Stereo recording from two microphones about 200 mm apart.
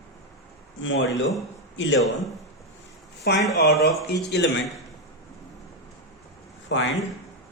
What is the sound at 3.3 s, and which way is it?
A man's voice, 55° left (ahead or behind).